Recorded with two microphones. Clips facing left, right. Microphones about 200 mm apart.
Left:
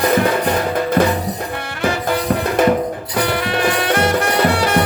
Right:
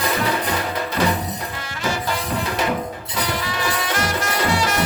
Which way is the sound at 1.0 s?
50° left (ahead or behind).